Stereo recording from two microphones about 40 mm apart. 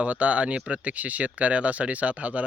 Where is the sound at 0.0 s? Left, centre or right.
Right.